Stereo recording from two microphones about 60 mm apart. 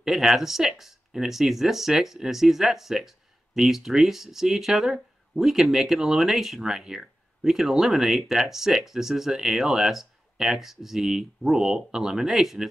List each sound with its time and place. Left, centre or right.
0.0 s speech: centre